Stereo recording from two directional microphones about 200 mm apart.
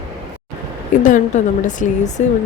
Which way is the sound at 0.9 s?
40° left (ahead or behind).